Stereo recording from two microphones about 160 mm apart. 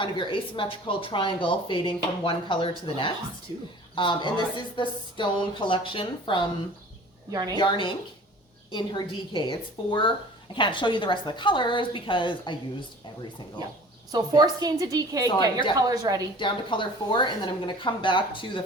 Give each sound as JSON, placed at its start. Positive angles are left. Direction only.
{"t": 0.0, "sound": "speech", "side_deg": 30}
{"t": 3.5, "sound": "speech", "side_deg": -30}
{"t": 3.9, "sound": "speech", "side_deg": 30}
{"t": 7.3, "sound": "a woman's voice", "side_deg": -25}
{"t": 7.5, "sound": "speech", "side_deg": 30}
{"t": 14.1, "sound": "a woman's voice", "side_deg": -25}
{"t": 16.4, "sound": "speech", "side_deg": 30}